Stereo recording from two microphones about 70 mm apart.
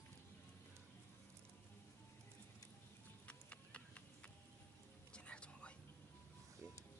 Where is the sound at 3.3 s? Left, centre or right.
Centre.